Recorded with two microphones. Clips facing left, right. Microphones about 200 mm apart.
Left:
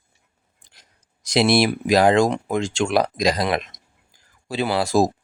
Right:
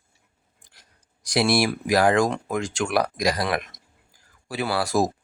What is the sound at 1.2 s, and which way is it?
Speech, 20° left (ahead or behind).